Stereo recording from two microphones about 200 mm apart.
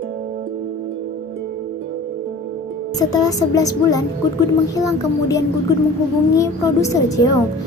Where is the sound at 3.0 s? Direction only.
20° left (ahead or behind).